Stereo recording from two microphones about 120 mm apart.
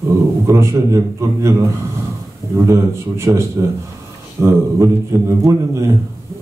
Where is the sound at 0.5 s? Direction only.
25° right (ahead or behind).